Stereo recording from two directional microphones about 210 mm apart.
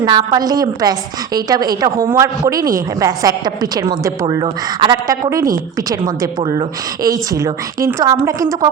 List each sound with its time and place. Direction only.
0.0 s a woman's voice: 20° right (ahead or behind)
6.4 s a woman's voice: 20° right (ahead or behind)